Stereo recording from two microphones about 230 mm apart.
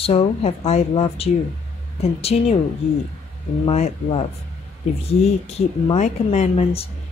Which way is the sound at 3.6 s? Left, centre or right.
Left.